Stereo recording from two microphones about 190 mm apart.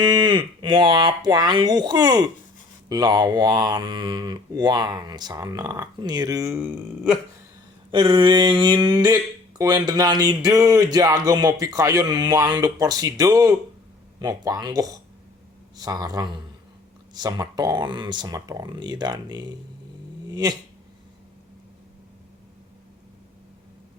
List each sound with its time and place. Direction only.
0.0 s speech: 25° right (ahead or behind)
7.9 s speech: 25° right (ahead or behind)
20.2 s dog: 20° right (ahead or behind)